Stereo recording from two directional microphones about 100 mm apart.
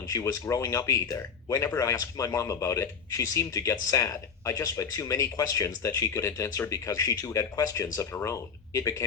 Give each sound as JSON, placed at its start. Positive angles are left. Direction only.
{"t": 0.1, "sound": "speech", "side_deg": 30}